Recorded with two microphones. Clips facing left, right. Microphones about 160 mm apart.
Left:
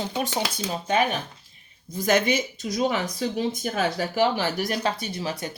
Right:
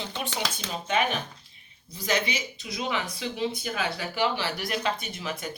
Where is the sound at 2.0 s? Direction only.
50° left (ahead or behind).